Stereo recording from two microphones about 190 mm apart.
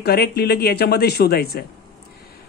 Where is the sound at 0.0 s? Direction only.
55° left (ahead or behind).